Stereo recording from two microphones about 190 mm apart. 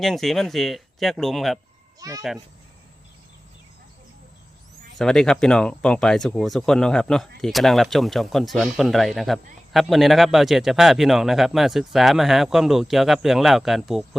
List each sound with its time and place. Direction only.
0.0 s speech: centre (ahead or behind)
2.0 s speech: 15° right (ahead or behind)
4.9 s speech: centre (ahead or behind)